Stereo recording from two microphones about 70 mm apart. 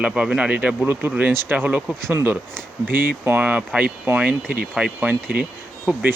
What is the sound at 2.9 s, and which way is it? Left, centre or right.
Speech, right.